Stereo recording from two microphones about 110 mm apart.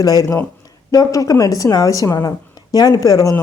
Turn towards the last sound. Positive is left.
turn(degrees=30)  # may be behind; listen again after turning